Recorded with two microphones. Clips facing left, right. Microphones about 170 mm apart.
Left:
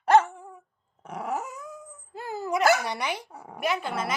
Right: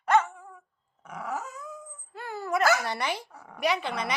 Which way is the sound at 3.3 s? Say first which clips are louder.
Left 5 dB; 25° left (ahead or behind).